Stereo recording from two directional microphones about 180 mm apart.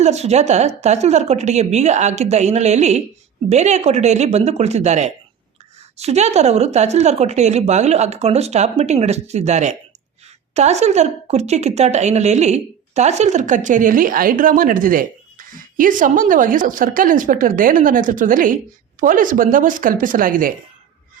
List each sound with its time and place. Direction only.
0.0 s speech: 40° right (ahead or behind)